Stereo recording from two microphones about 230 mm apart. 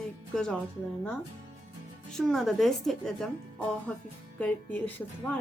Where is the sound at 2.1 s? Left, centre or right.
Centre.